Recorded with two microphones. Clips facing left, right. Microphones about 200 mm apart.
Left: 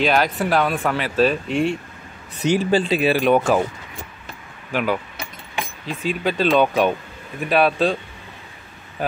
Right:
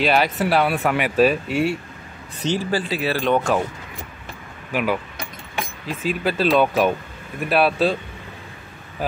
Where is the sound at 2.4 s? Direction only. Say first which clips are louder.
Left 4 dB; 15° left (ahead or behind).